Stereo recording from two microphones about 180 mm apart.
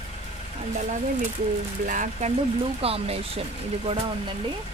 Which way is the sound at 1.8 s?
45° right (ahead or behind).